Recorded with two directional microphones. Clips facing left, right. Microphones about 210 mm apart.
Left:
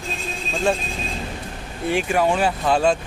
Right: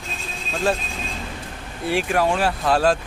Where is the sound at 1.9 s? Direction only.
Centre (ahead or behind).